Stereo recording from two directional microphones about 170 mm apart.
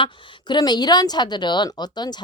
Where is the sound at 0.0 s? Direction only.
25° left (ahead or behind).